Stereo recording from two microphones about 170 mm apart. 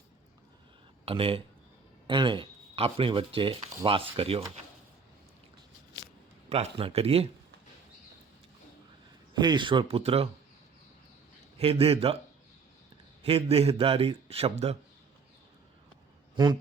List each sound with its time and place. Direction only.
1.0 s speech: 35° right (ahead or behind)
6.5 s speech: 35° right (ahead or behind)
9.3 s speech: 25° right (ahead or behind)
11.5 s speech: 35° right (ahead or behind)
13.2 s speech: 35° right (ahead or behind)
16.3 s speech: 25° right (ahead or behind)